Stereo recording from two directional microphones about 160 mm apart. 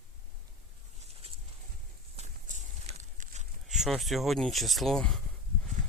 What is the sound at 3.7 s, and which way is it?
Speech, centre (ahead or behind).